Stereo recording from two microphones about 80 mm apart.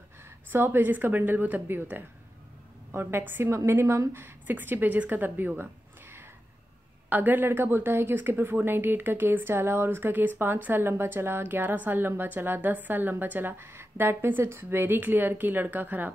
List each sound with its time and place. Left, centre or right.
0.2 s a woman's voice: right